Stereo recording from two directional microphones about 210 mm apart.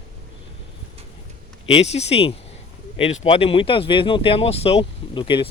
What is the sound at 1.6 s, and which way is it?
Speech, 30° left (ahead or behind).